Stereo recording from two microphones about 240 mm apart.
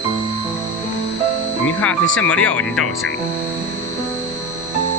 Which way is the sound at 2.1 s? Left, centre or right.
Centre.